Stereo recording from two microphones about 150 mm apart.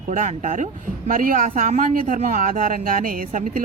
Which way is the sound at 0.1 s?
60° right (ahead or behind).